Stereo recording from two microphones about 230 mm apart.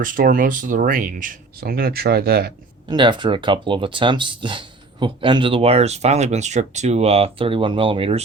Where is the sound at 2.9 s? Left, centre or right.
Centre.